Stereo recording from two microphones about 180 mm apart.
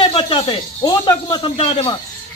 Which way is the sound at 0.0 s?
30° left (ahead or behind).